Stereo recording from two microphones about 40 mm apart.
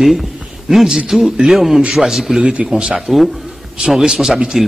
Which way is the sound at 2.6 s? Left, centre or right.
Right.